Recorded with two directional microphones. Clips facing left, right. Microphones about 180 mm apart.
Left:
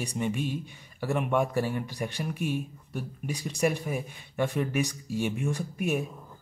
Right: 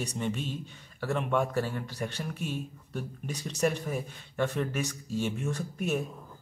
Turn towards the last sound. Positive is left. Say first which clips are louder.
# left 2 dB
turn(degrees=10)  # may be behind; listen again after turning